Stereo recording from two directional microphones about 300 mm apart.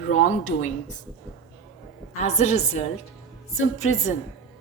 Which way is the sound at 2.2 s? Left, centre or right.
Left.